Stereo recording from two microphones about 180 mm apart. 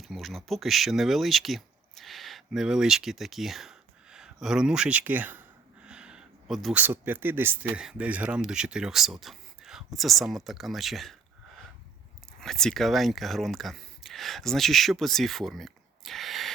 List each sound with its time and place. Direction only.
0.0 s speech: centre (ahead or behind)
12.4 s speech: centre (ahead or behind)